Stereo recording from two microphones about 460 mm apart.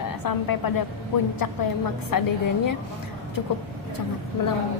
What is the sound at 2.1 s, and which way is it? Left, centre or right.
Speech, left.